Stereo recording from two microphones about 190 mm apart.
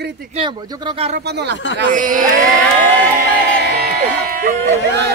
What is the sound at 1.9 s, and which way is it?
Speech, 45° right (ahead or behind).